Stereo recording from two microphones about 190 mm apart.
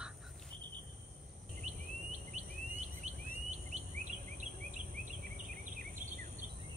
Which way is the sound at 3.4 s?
40° right (ahead or behind).